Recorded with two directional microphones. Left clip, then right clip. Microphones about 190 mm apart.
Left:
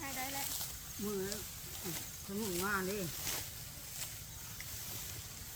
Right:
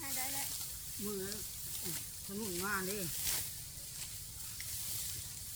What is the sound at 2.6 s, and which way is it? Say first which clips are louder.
Speech: left 1 dB; 20° right (ahead or behind).